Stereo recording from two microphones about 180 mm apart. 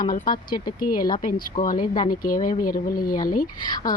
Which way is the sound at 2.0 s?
50° left (ahead or behind).